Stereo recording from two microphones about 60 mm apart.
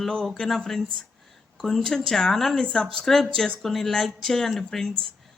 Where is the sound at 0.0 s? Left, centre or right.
Centre.